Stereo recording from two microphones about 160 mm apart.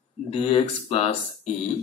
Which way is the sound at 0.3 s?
35° left (ahead or behind).